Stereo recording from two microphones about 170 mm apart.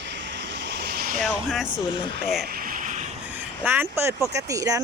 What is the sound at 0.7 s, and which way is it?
Vehicle, 75° right (ahead or behind).